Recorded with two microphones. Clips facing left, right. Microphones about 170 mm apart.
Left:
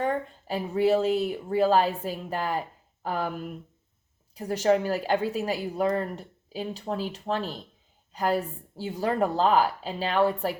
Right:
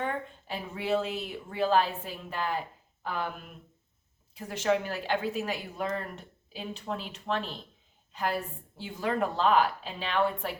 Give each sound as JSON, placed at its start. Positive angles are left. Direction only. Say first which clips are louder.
{"t": 0.0, "sound": "a woman's voice", "louder": "left 6 dB", "side_deg": 35}